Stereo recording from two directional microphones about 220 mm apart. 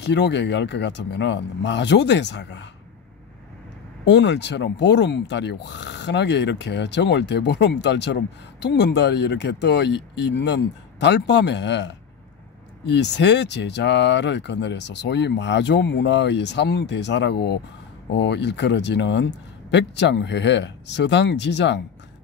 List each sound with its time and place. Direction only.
0.0 s speech: 50° left (ahead or behind)
4.0 s speech: 50° left (ahead or behind)